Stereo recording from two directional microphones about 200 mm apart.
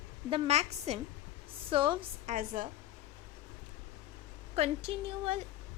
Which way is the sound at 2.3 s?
45° right (ahead or behind).